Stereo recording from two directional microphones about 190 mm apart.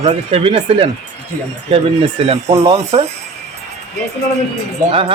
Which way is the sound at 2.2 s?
35° right (ahead or behind).